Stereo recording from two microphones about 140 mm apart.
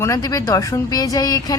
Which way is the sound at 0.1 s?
25° left (ahead or behind).